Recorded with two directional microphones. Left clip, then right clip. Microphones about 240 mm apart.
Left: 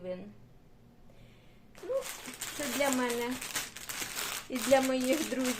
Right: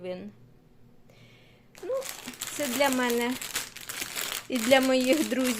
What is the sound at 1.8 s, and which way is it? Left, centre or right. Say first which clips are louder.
Speech: right 3 dB; right.